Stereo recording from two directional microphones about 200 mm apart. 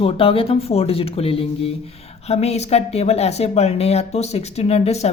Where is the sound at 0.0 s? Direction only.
30° left (ahead or behind).